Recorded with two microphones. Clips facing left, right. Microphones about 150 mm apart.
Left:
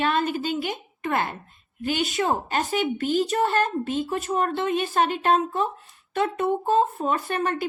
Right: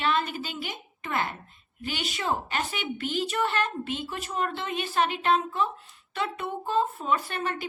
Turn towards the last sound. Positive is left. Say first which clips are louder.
# left 6 dB
turn(degrees=45)  # may be behind; listen again after turning